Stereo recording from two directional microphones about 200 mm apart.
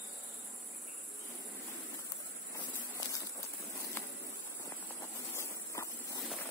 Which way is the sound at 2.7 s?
15° left (ahead or behind).